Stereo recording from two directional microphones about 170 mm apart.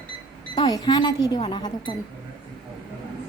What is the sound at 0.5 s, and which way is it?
Speech, 25° left (ahead or behind).